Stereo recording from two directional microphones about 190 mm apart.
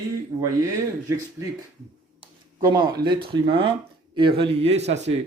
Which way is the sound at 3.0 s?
25° right (ahead or behind).